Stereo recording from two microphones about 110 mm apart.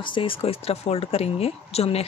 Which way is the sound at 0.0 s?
50° left (ahead or behind).